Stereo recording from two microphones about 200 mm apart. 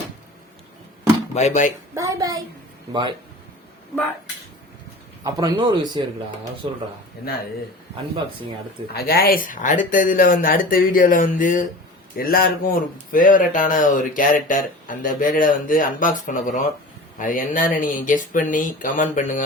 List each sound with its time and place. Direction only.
1.3 s speech: 35° left (ahead or behind)
2.0 s speech: 15° right (ahead or behind)
5.2 s speech: 20° right (ahead or behind)
8.9 s speech: 50° left (ahead or behind)